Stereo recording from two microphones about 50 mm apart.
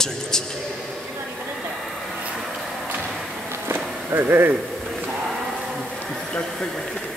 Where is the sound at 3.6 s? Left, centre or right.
Right.